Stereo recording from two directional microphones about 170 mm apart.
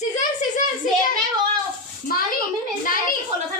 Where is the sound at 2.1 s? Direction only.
55° left (ahead or behind).